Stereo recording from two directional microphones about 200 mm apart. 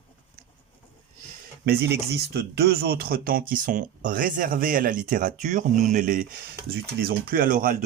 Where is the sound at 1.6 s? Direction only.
55° right (ahead or behind).